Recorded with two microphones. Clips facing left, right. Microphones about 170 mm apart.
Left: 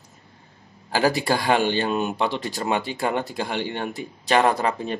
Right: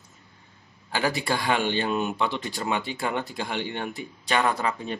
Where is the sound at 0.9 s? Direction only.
35° left (ahead or behind).